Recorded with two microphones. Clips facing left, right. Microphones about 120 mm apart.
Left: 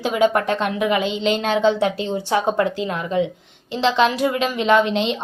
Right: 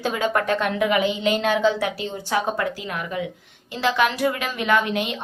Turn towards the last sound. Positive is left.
turn(degrees=25)  # may be behind; listen again after turning